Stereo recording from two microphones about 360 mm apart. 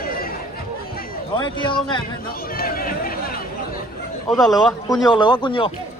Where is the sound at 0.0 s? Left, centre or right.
Left.